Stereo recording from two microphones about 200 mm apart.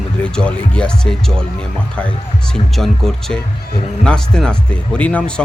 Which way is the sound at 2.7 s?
Centre (ahead or behind).